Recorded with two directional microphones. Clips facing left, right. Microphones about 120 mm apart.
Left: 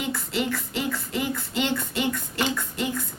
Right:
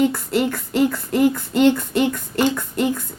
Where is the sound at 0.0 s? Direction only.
50° right (ahead or behind).